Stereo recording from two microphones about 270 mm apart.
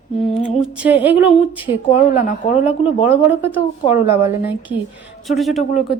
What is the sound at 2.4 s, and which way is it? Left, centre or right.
Speech, left.